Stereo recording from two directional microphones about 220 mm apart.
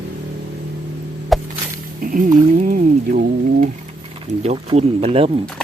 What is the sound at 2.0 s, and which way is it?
Music, 45° right (ahead or behind).